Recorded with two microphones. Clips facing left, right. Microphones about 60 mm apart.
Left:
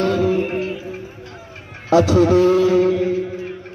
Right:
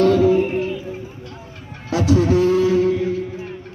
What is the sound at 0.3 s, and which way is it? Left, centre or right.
Music, left.